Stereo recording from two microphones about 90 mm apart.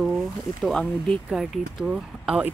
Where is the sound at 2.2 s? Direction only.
15° right (ahead or behind).